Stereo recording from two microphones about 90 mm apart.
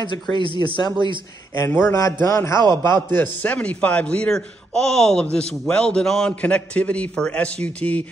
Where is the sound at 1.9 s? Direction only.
35° left (ahead or behind); by 8.0 s 15° left (ahead or behind).